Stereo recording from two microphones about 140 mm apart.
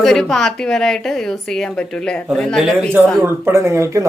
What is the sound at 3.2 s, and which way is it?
Speech, 20° right (ahead or behind).